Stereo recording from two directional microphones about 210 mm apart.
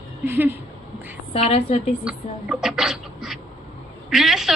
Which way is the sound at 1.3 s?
30° left (ahead or behind).